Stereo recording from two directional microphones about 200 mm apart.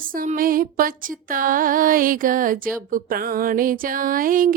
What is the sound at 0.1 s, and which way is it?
Speech, 45° right (ahead or behind).